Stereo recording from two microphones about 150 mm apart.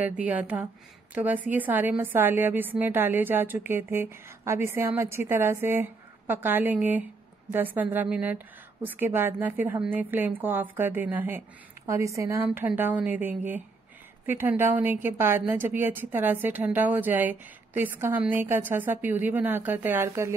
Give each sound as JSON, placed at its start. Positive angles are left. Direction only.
{"t": 0.0, "sound": "a woman's voice", "side_deg": -10}